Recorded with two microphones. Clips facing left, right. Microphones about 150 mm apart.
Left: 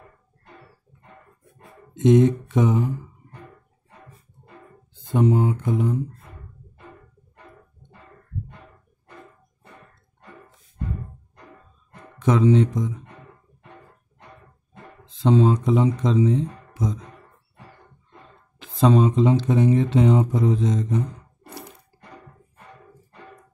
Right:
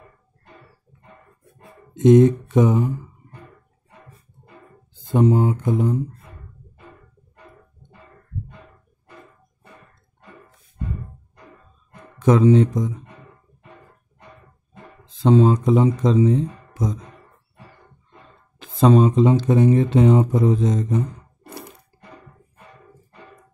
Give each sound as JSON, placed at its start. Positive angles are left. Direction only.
{"t": 2.0, "sound": "speech", "side_deg": -45}
{"t": 5.1, "sound": "a sound", "side_deg": -35}
{"t": 12.2, "sound": "speech", "side_deg": -45}
{"t": 15.2, "sound": "speech", "side_deg": -45}
{"t": 18.6, "sound": "speech", "side_deg": -45}